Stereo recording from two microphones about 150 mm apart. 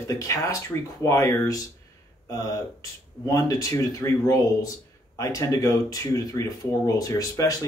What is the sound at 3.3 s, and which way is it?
Speech, 25° left (ahead or behind).